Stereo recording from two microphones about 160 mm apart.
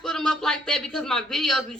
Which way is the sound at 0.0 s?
5° left (ahead or behind).